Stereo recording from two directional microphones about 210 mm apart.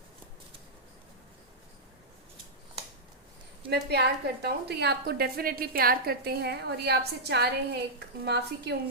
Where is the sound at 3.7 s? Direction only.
50° right (ahead or behind).